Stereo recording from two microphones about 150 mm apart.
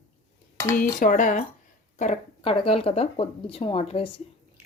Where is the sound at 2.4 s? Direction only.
40° left (ahead or behind).